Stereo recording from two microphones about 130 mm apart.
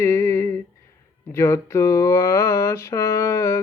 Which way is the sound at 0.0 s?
25° left (ahead or behind).